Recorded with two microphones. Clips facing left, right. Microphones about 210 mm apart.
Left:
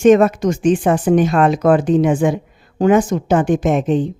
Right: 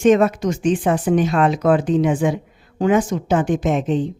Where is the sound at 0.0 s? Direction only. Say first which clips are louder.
Left 4 dB; 50° left (ahead or behind).